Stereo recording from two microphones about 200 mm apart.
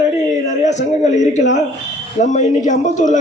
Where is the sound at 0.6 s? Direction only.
35° left (ahead or behind).